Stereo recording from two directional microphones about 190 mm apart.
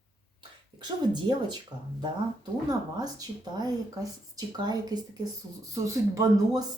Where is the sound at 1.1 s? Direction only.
25° right (ahead or behind).